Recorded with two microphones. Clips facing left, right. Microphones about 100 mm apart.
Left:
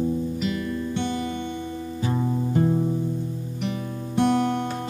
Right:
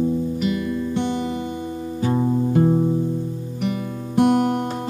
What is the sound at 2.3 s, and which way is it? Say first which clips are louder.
Music: right 4 dB; 20° right (ahead or behind).